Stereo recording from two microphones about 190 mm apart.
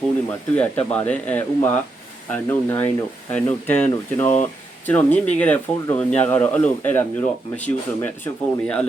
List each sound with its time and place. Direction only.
0.3 s speech: 10° left (ahead or behind)